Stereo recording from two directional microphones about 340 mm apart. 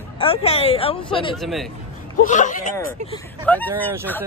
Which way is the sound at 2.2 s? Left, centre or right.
Left.